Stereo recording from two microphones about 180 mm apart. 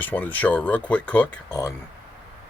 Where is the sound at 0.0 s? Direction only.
10° left (ahead or behind).